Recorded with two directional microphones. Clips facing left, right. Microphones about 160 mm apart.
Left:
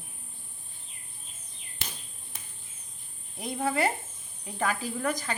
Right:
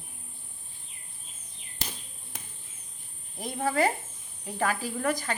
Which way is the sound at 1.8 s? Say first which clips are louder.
Right 3 dB; 40° right (ahead or behind).